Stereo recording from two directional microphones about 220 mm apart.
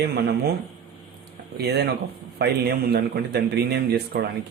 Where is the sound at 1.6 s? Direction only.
50° right (ahead or behind).